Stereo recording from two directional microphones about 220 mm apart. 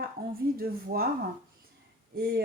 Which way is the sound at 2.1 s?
45° right (ahead or behind).